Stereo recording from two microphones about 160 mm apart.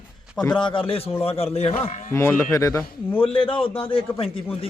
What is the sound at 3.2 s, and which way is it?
A man's voice, 35° left (ahead or behind).